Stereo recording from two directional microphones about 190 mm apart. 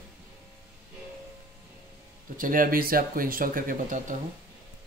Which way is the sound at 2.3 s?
45° right (ahead or behind).